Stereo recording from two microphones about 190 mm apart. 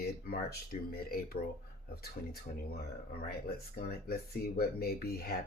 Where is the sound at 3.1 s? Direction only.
50° left (ahead or behind).